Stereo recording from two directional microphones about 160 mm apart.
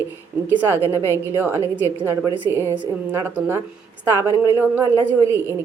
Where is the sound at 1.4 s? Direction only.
10° right (ahead or behind).